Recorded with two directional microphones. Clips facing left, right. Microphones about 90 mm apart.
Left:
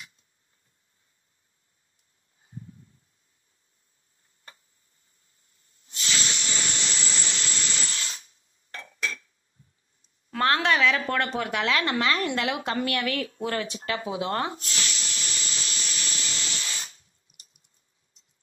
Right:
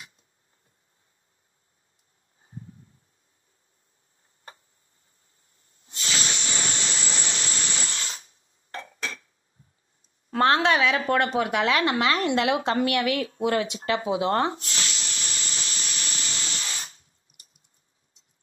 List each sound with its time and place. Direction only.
5.6 s hiss: 35° right (ahead or behind)
10.3 s a woman's voice: 25° right (ahead or behind)
14.5 s a sound: 40° right (ahead or behind)